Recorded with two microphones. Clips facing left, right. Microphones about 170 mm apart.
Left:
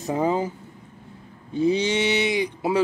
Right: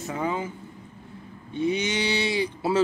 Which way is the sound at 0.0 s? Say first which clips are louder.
Left 6 dB; 35° left (ahead or behind).